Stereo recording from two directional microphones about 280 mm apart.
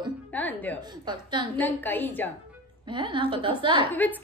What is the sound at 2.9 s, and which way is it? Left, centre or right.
Speech, centre.